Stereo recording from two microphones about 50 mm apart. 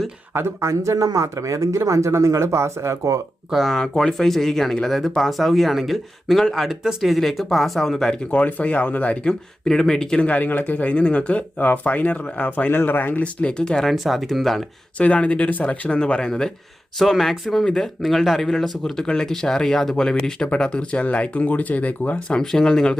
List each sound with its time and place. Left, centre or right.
0.3 s speech: right
3.5 s speech: centre
8.3 s speech: left
9.2 s speech: centre
10.2 s speech: left; by 13.8 s centre
13.9 s speech: centre
14.9 s speech: left
17.0 s speech: centre; by 22.4 s left
22.4 s speech: centre